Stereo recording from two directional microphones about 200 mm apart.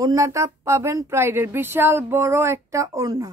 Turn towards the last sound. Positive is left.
turn(degrees=-15)  # may be behind; listen again after turning